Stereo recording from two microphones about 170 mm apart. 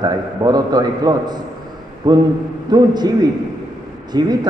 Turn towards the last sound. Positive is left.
turn(degrees=-25)  # may be behind; listen again after turning